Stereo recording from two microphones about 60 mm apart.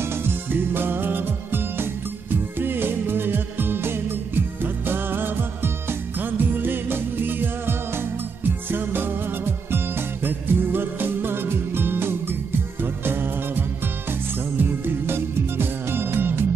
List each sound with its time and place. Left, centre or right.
0.2 s music: right
10.2 s music: right